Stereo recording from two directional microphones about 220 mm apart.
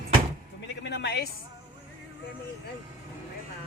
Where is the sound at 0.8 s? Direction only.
50° left (ahead or behind).